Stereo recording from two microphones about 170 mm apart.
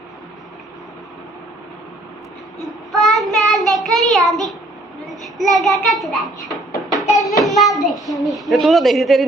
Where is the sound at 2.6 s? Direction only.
Centre (ahead or behind).